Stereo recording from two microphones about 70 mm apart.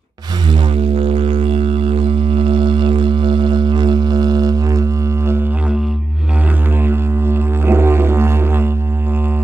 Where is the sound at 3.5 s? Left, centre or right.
Right.